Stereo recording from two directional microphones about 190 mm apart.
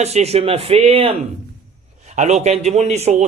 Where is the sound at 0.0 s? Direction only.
35° right (ahead or behind).